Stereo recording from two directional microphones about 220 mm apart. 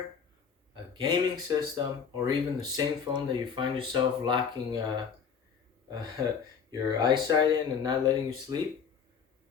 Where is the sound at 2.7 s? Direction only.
20° right (ahead or behind).